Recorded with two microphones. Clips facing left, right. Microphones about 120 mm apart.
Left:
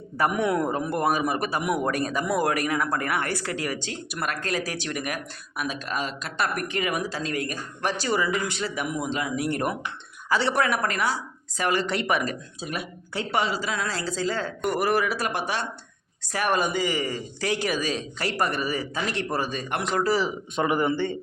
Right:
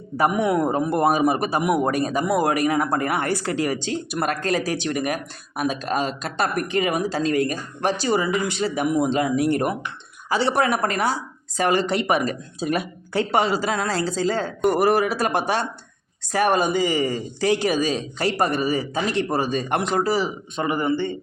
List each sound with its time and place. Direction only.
0.2 s a woman's voice: 10° right (ahead or behind)
8.7 s a woman's voice: 30° right (ahead or behind)
13.3 s a woman's voice: 40° right (ahead or behind); by 19.5 s 20° right (ahead or behind)
19.5 s speech: 35° right (ahead or behind)
19.9 s speech: 15° right (ahead or behind)
20.6 s speech: 5° left (ahead or behind)